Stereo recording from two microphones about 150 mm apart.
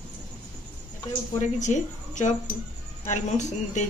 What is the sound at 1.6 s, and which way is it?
A woman's voice, 55° left (ahead or behind).